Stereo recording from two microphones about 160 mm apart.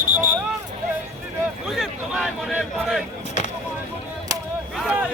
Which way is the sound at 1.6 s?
5° right (ahead or behind).